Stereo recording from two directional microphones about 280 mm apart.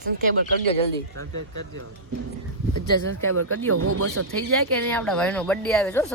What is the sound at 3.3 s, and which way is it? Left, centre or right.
Speech, right.